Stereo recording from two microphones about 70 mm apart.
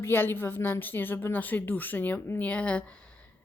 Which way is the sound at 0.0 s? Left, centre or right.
Left.